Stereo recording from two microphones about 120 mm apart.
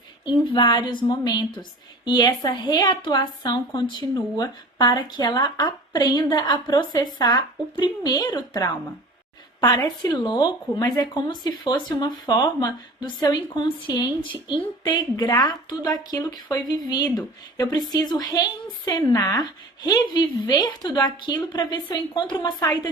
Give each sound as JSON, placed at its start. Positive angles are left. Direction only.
{"t": 0.3, "sound": "a woman's voice", "side_deg": 40}